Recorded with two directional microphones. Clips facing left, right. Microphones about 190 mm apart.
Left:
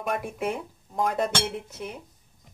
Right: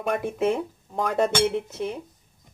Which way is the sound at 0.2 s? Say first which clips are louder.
Right 6 dB; 25° right (ahead or behind).